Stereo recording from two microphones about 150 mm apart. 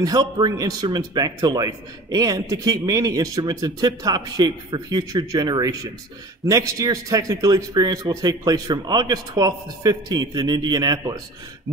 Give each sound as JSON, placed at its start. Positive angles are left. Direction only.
{"t": 0.0, "sound": "a man's voice", "side_deg": -25}